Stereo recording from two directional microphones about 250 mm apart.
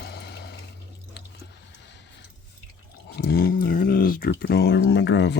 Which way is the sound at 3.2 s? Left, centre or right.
Left.